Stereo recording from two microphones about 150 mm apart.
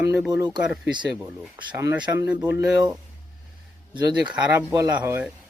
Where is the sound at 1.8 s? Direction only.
25° right (ahead or behind).